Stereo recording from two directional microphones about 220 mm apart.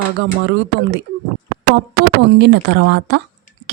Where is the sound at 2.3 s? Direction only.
50° right (ahead or behind).